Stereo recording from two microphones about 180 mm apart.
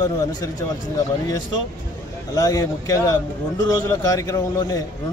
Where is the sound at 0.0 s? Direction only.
20° left (ahead or behind).